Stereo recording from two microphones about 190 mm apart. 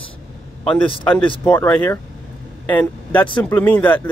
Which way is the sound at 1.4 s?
10° left (ahead or behind).